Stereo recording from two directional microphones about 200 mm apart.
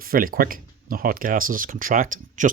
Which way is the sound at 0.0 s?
45° right (ahead or behind).